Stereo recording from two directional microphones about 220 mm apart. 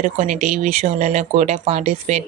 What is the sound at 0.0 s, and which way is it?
Speech, 35° right (ahead or behind).